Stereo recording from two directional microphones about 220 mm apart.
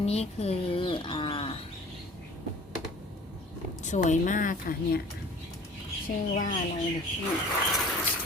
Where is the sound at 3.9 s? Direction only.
35° left (ahead or behind).